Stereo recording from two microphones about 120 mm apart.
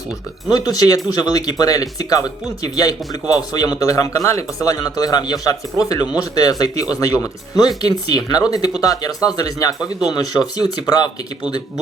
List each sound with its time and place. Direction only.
0.4 s speech: 30° left (ahead or behind)